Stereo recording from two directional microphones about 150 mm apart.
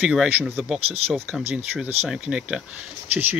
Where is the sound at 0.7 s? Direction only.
40° right (ahead or behind).